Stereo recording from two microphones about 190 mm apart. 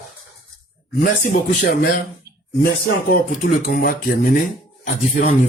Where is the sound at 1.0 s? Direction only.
50° left (ahead or behind).